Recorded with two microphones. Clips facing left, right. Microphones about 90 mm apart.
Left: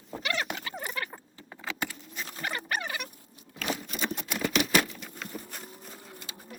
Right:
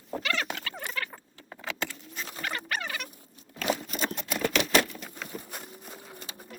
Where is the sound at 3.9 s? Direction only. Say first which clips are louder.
Right 1 dB; centre (ahead or behind).